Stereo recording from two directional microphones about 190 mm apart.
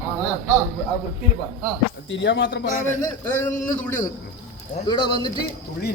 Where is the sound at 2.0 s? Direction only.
70° left (ahead or behind).